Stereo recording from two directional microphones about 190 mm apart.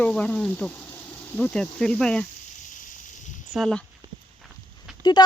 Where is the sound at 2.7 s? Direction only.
45° left (ahead or behind).